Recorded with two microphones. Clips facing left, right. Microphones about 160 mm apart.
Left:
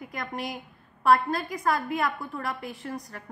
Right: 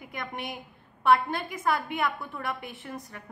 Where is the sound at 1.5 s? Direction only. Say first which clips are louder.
Even; 25° right (ahead or behind).